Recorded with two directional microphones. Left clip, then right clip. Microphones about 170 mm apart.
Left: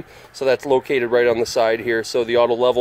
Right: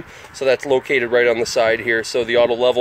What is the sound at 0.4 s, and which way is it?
Speech, 15° left (ahead or behind).